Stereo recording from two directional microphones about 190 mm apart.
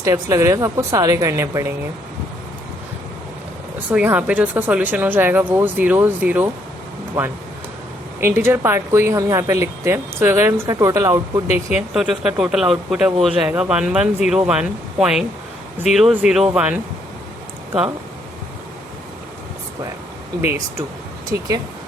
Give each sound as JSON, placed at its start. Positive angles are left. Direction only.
{"t": 0.0, "sound": "speech", "side_deg": -15}
{"t": 3.9, "sound": "speech", "side_deg": -10}
{"t": 11.7, "sound": "speech", "side_deg": -5}
{"t": 21.3, "sound": "speech", "side_deg": -15}